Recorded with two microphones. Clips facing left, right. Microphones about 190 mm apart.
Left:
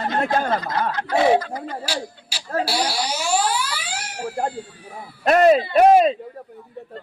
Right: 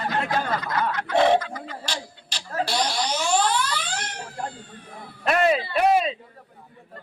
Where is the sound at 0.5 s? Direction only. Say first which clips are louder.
Left 3 dB; 30° left (ahead or behind).